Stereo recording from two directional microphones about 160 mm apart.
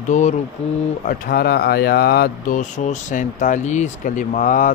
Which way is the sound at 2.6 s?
50° left (ahead or behind).